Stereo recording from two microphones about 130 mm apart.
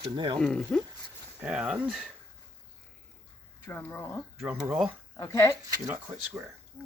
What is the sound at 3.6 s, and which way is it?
Speech, 15° left (ahead or behind).